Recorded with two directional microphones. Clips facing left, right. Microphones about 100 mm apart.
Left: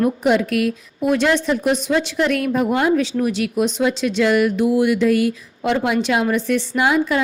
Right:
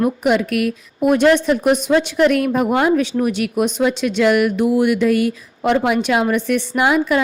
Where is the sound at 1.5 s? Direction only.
55° right (ahead or behind).